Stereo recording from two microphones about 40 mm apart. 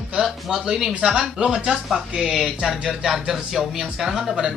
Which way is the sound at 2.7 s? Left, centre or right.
Centre.